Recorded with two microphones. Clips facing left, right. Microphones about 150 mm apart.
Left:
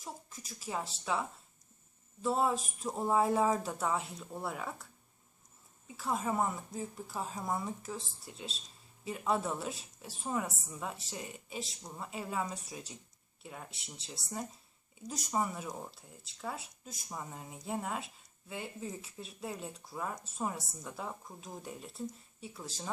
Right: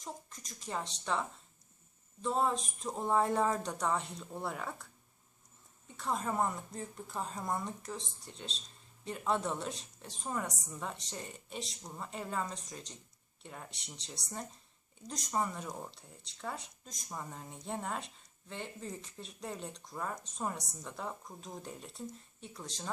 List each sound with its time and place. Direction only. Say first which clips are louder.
0.0 s speech: even; 5° left (ahead or behind)
2.2 s speech: left 1 dB; 5° left (ahead or behind)
5.9 s speech: left 1 dB; 5° left (ahead or behind)